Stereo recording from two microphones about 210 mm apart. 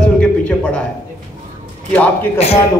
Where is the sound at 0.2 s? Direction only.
5° left (ahead or behind).